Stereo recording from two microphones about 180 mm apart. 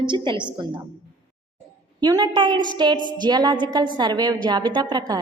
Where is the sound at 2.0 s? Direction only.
20° right (ahead or behind).